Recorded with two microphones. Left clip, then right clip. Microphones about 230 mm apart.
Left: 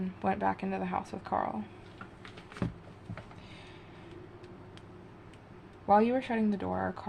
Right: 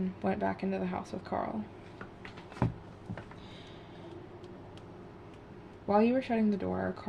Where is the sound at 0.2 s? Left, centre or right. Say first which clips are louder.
Left 3 dB; left.